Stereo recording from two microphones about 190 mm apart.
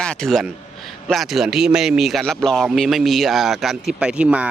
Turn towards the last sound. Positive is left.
turn(degrees=-5)  # may be behind; listen again after turning